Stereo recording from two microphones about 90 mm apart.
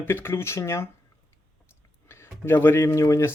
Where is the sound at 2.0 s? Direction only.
30° left (ahead or behind).